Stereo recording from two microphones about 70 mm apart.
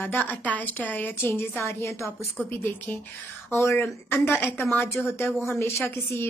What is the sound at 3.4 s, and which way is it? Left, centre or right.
A woman's voice, left.